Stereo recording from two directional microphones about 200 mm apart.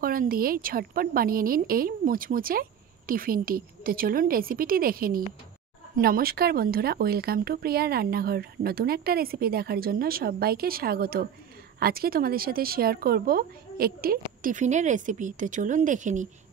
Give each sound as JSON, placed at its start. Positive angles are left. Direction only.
{"t": 0.0, "sound": "speech", "side_deg": -45}